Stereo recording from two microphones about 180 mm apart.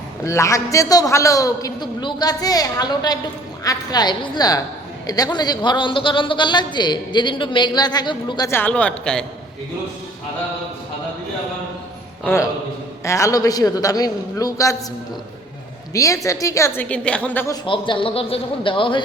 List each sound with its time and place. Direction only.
0.3 s a man's voice: 15° left (ahead or behind)
8.4 s a woman's voice: 10° left (ahead or behind)
12.2 s a woman's voice: 15° left (ahead or behind)
15.9 s a woman's voice: 20° left (ahead or behind)
17.7 s a man's voice: 30° left (ahead or behind)